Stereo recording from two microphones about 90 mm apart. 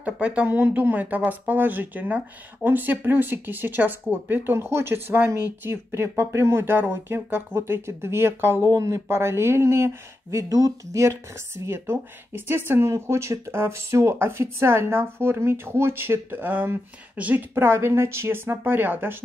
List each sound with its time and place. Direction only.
0.0 s speech: 15° right (ahead or behind)